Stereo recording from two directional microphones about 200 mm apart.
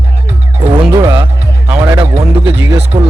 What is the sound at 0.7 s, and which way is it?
Music, 20° right (ahead or behind).